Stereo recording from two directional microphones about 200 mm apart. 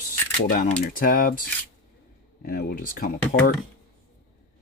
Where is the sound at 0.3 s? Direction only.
40° left (ahead or behind).